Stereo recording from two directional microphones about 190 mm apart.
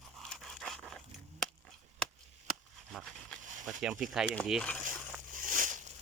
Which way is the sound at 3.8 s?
5° right (ahead or behind).